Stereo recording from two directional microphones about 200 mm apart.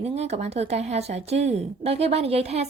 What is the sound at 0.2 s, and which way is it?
A woman's voice, 30° right (ahead or behind).